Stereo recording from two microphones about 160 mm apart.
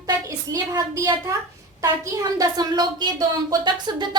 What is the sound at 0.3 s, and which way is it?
A woman's voice, 20° right (ahead or behind).